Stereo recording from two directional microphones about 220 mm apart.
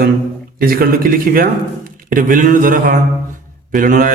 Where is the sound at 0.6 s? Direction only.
40° right (ahead or behind).